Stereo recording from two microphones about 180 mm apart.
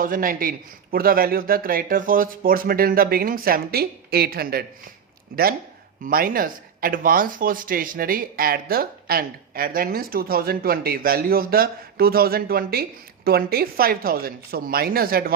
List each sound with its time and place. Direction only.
0.0 s speech: 50° right (ahead or behind)